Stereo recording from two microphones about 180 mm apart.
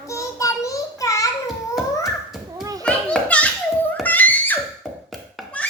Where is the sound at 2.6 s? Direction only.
20° right (ahead or behind).